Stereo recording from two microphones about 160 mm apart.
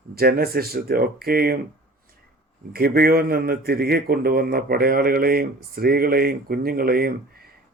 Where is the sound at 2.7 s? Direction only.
70° right (ahead or behind).